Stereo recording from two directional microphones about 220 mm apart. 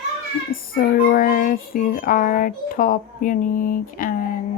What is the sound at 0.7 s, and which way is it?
Speech, 40° left (ahead or behind).